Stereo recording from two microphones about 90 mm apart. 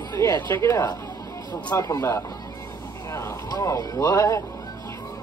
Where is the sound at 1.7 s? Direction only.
35° left (ahead or behind).